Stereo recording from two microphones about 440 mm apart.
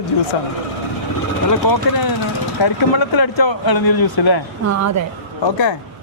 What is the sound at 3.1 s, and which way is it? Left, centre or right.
Speech, left.